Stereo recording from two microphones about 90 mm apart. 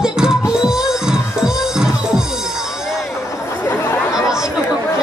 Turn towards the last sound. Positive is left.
turn(degrees=-5)  # may be behind; listen again after turning